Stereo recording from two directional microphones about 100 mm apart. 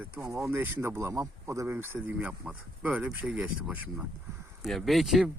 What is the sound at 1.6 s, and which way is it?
Speech, 20° right (ahead or behind).